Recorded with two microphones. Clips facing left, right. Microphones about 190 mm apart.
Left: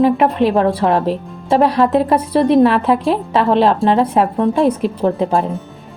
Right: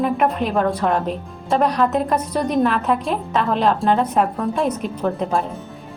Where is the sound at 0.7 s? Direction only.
30° left (ahead or behind).